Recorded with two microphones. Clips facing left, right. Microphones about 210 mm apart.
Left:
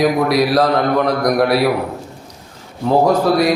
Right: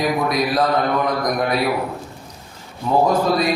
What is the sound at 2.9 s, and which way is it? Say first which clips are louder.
Speech: left 4 dB; 70° left (ahead or behind).